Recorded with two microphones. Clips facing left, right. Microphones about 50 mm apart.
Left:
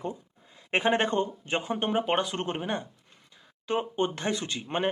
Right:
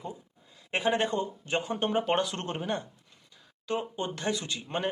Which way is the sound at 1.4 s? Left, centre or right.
Left.